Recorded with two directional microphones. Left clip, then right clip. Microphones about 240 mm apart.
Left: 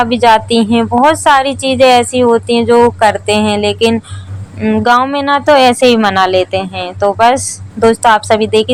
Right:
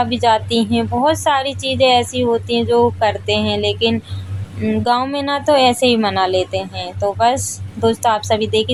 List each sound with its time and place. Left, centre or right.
0.0 s a woman's voice: centre